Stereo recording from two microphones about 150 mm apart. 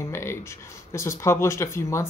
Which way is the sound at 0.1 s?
15° left (ahead or behind).